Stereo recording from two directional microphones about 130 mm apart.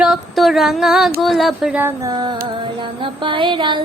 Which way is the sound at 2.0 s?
30° right (ahead or behind).